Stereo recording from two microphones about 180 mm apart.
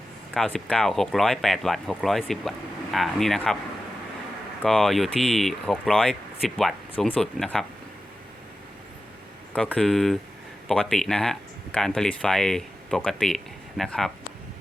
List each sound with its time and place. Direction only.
0.3 s speech: centre (ahead or behind)
4.6 s speech: centre (ahead or behind)
9.5 s speech: 5° left (ahead or behind)